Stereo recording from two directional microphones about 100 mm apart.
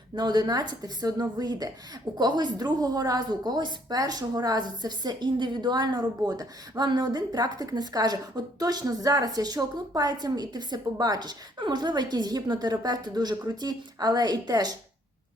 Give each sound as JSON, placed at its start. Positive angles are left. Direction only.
{"t": 0.2, "sound": "a woman's voice", "side_deg": -45}